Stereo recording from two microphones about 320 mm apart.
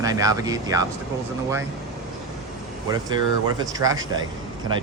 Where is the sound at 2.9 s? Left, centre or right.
Centre.